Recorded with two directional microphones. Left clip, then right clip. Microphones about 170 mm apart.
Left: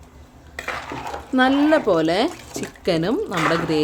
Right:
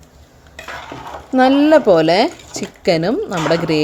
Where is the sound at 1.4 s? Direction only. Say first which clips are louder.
Right 6 dB; 30° right (ahead or behind).